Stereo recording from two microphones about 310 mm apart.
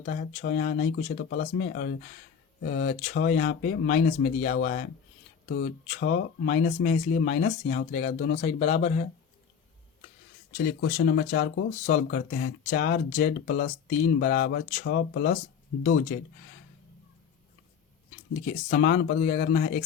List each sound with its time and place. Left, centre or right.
0.0 s speech: left
8.4 s speech: left
10.8 s speech: left
18.4 s speech: left